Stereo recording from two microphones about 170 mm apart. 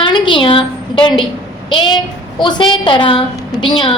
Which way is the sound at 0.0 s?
30° left (ahead or behind).